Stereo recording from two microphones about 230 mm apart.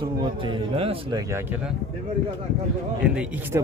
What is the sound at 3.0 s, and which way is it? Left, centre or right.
Speech, centre.